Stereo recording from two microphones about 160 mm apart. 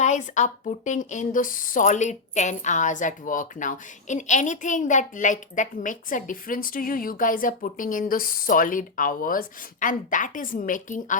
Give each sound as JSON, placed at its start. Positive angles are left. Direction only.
{"t": 0.0, "sound": "a woman's voice", "side_deg": 50}